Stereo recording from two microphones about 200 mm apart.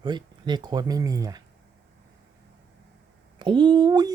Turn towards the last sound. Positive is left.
turn(degrees=-20)  # may be behind; listen again after turning